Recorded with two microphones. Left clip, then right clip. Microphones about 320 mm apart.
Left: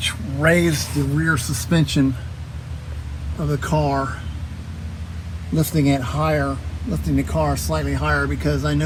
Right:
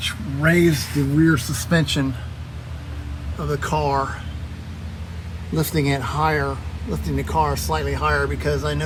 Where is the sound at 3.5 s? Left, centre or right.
Right.